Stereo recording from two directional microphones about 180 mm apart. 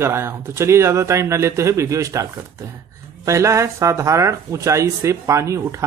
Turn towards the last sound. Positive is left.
turn(degrees=-15)  # may be behind; listen again after turning